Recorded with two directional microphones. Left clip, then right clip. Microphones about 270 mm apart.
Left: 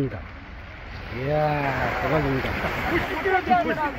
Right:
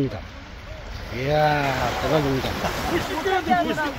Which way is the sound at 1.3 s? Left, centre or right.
Centre.